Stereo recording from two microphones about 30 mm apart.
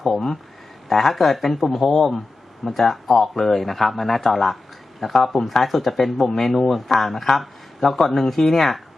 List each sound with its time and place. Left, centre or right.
0.0 s speech: centre